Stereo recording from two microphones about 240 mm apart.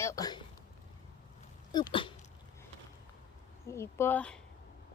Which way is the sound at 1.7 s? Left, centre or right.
Centre.